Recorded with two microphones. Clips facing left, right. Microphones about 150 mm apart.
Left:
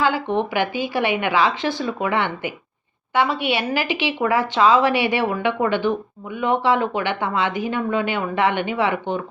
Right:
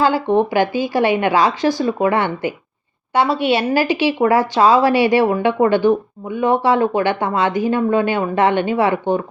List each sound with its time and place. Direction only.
0.0 s a woman's voice: 40° right (ahead or behind)